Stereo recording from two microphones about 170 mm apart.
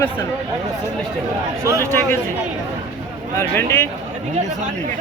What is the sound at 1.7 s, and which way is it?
Speech, 15° left (ahead or behind).